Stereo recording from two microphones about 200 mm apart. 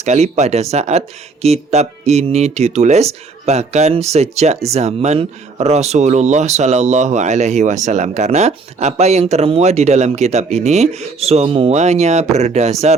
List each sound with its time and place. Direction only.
0.0 s speech: 35° right (ahead or behind)